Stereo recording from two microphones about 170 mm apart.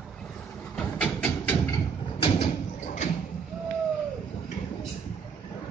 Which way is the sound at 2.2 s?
40° left (ahead or behind).